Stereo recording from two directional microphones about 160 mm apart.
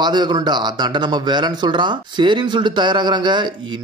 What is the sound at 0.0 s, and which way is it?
A man's voice, 25° right (ahead or behind).